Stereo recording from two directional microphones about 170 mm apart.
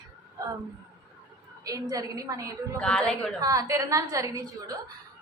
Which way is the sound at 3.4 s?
20° right (ahead or behind).